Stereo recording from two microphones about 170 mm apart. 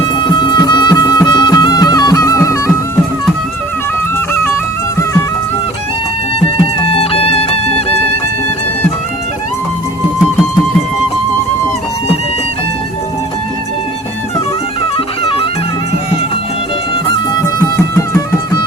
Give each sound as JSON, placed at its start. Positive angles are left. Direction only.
{"t": 0.2, "sound": "music", "side_deg": 25}
{"t": 6.4, "sound": "music", "side_deg": 35}
{"t": 14.9, "sound": "music", "side_deg": 30}
{"t": 17.6, "sound": "music", "side_deg": 15}